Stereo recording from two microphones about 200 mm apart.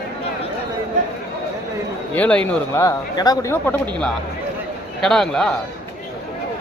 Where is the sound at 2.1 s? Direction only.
5° left (ahead or behind).